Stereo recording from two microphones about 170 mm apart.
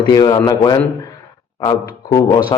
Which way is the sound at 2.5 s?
30° left (ahead or behind).